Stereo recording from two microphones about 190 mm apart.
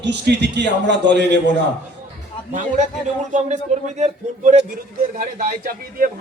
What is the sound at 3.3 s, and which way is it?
Speech, 35° right (ahead or behind).